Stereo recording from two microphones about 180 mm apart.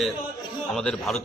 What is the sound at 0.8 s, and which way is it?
Speech, centre (ahead or behind).